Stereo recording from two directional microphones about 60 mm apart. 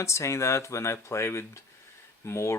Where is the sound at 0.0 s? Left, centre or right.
Left.